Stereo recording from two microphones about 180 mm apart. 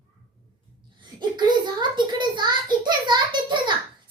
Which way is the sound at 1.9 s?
25° right (ahead or behind).